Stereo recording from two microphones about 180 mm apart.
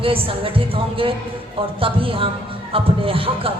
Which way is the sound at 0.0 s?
30° right (ahead or behind).